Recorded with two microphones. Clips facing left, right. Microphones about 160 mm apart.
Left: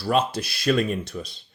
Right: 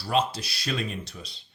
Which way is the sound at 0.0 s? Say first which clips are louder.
Left 3 dB; 55° left (ahead or behind).